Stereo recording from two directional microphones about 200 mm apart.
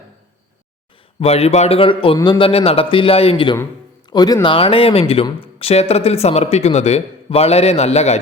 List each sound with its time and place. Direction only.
1.2 s a man's voice: 30° left (ahead or behind)